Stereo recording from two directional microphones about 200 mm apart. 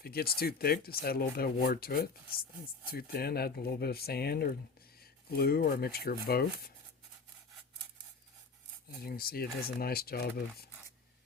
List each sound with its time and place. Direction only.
0.0 s speech: 50° left (ahead or behind)
9.0 s speech: 50° left (ahead or behind)